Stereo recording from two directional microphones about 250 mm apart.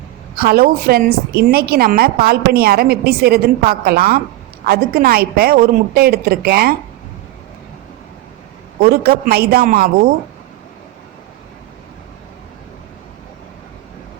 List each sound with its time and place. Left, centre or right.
0.3 s a woman's voice: right
8.8 s a woman's voice: right